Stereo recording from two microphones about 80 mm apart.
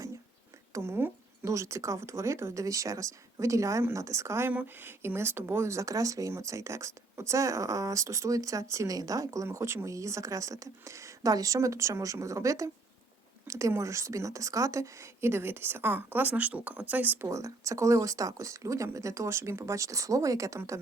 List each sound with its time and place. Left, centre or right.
0.7 s speech: right
4.5 s speech: right
17.2 s speech: right